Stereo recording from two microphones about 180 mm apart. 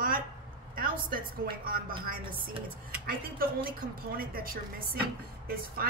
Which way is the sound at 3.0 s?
55° right (ahead or behind).